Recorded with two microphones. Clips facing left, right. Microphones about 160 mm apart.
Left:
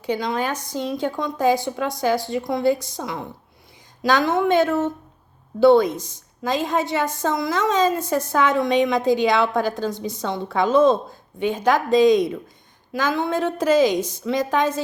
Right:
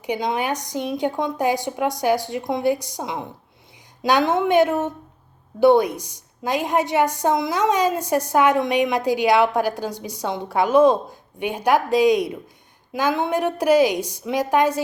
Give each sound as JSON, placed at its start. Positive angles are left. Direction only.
{"t": 0.0, "sound": "a woman's voice", "side_deg": -15}